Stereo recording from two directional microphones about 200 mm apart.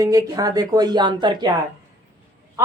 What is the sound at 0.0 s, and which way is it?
A woman's voice, 15° right (ahead or behind).